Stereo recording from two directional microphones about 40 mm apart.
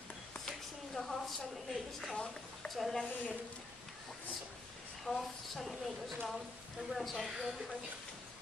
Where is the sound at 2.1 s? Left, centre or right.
Left.